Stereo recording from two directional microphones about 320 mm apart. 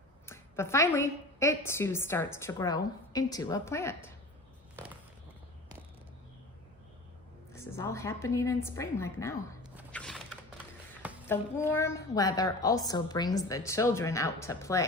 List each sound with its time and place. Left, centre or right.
0.3 s a woman's voice: centre
7.5 s a woman's voice: centre
9.7 s a sound: centre
11.8 s a woman's voice: centre